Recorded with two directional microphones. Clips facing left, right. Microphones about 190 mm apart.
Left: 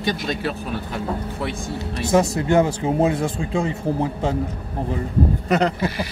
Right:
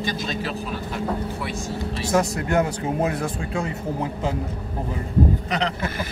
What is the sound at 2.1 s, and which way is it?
Speech, 25° left (ahead or behind).